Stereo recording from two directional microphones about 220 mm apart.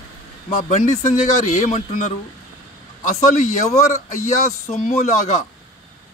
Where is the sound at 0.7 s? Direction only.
30° left (ahead or behind).